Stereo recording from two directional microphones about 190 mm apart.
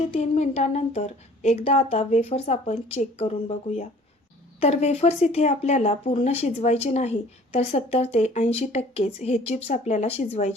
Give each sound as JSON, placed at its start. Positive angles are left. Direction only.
{"t": 0.0, "sound": "speech", "side_deg": 35}